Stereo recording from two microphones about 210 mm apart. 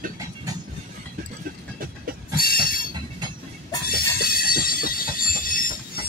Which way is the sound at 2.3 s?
45° left (ahead or behind).